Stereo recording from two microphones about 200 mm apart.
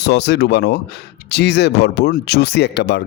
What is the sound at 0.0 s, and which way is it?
Speech, 60° left (ahead or behind).